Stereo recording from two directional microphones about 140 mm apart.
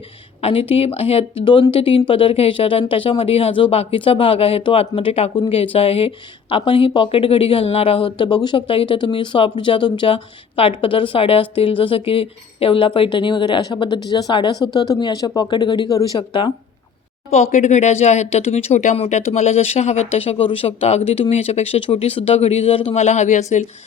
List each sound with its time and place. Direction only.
0.4 s a woman's voice: 40° left (ahead or behind)
17.3 s speech: 55° left (ahead or behind)